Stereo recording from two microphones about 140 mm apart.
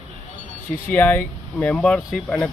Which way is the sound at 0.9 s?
15° left (ahead or behind).